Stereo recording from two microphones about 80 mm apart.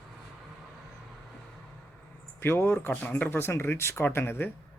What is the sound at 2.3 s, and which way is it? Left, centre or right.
Speech, left.